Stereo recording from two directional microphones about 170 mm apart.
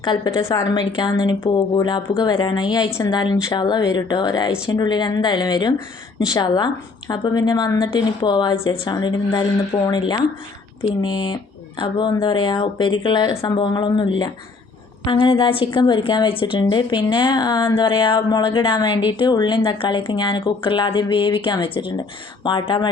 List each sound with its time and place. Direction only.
0.0 s a woman's voice: 25° left (ahead or behind)